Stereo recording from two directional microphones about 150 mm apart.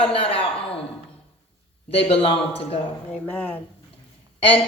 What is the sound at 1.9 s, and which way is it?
Speech, 40° left (ahead or behind).